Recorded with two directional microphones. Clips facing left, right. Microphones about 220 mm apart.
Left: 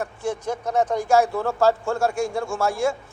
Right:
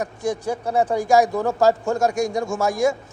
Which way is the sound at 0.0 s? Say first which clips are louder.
Right 3 dB; 15° right (ahead or behind).